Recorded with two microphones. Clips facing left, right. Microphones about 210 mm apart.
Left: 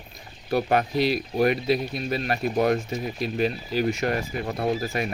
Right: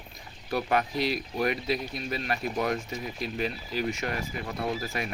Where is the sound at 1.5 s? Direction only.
65° left (ahead or behind).